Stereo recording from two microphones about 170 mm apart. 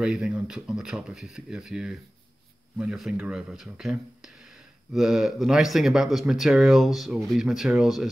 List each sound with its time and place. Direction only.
0.0 s speech: 5° right (ahead or behind)